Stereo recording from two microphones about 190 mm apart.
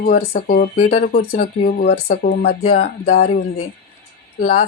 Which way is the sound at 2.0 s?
60° left (ahead or behind).